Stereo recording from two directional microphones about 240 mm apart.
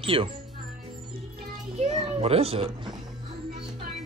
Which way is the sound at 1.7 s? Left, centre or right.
Right.